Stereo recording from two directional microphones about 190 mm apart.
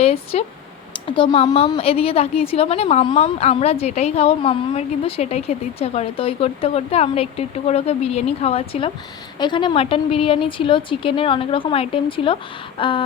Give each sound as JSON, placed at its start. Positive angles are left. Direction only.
{"t": 0.0, "sound": "a woman's voice", "side_deg": 30}